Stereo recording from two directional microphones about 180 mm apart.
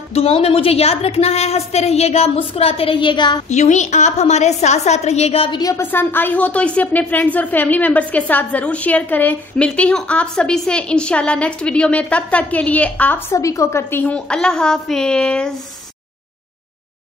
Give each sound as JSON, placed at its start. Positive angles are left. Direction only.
{"t": 0.1, "sound": "a woman's voice", "side_deg": 35}
{"t": 3.4, "sound": "a woman's voice", "side_deg": 40}
{"t": 5.6, "sound": "a woman's voice", "side_deg": 15}